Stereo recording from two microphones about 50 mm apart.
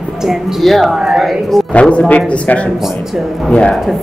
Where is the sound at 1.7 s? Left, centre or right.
Left.